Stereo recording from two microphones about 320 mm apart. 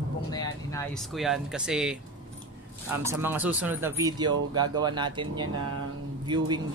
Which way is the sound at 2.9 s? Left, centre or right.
Centre.